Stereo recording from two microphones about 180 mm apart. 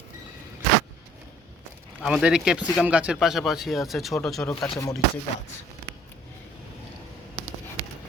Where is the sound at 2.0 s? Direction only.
5° right (ahead or behind).